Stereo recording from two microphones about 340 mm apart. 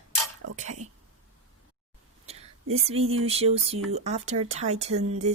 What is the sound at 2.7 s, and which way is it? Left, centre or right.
Speech, centre.